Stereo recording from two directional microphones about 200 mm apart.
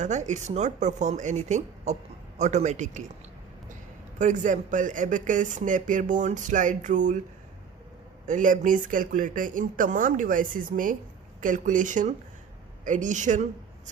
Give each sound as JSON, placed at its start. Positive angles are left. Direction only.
{"t": 0.0, "sound": "speech", "side_deg": -35}
{"t": 4.2, "sound": "speech", "side_deg": -40}
{"t": 8.3, "sound": "speech", "side_deg": -40}